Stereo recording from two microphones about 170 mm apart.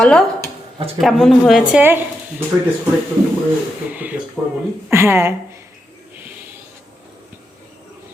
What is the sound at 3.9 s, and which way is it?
A woman's voice, 10° right (ahead or behind).